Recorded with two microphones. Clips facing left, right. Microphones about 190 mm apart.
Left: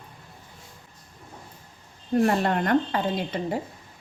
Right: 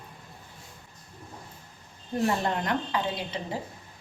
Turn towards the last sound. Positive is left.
turn(degrees=50)  # may be behind; listen again after turning